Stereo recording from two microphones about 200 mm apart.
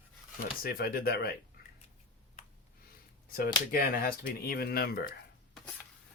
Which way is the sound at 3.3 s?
45° left (ahead or behind).